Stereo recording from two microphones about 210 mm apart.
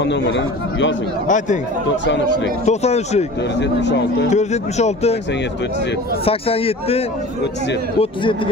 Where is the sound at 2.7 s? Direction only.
30° left (ahead or behind).